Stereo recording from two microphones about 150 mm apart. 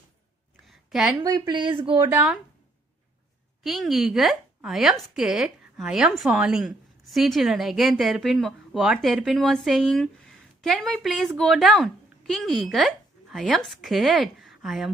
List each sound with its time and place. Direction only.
0.7 s a sound: centre (ahead or behind)
1.2 s a woman's voice: 30° right (ahead or behind)
3.6 s a woman's voice: centre (ahead or behind)